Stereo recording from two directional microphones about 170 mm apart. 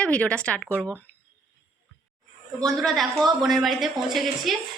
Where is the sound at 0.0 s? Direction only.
5° left (ahead or behind).